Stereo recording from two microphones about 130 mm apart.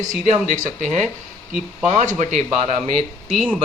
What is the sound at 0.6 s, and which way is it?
Speech, 65° right (ahead or behind).